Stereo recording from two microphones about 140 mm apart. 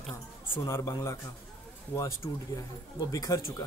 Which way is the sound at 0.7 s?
20° left (ahead or behind).